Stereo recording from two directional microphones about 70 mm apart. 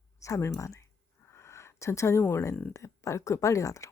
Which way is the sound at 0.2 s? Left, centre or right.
Left.